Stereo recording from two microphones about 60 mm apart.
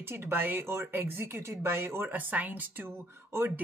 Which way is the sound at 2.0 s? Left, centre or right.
Right.